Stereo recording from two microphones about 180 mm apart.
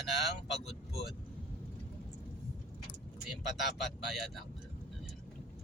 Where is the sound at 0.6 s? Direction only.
35° left (ahead or behind).